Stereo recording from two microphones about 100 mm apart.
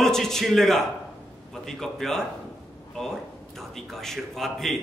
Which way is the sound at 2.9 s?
5° left (ahead or behind).